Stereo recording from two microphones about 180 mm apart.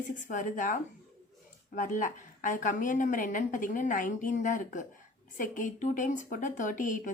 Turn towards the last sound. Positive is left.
turn(degrees=45)  # may be behind; listen again after turning